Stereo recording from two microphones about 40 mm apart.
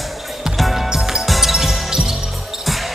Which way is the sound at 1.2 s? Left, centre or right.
Centre.